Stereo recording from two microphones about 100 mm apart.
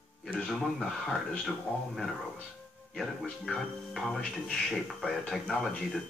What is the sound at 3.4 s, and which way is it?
Speech, 5° left (ahead or behind).